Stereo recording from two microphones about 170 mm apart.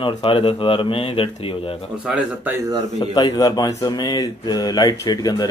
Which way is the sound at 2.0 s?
5° right (ahead or behind).